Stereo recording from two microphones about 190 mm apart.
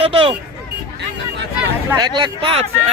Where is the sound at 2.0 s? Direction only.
25° right (ahead or behind).